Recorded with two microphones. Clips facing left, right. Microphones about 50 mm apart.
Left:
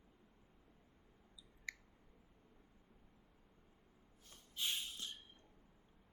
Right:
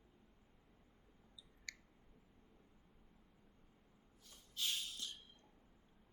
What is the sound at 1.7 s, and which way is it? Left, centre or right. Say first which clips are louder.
Clicking: left 4 dB; centre.